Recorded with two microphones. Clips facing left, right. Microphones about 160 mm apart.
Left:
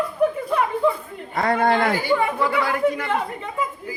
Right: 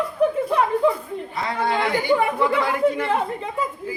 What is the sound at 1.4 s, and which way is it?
Speech, 50° left (ahead or behind).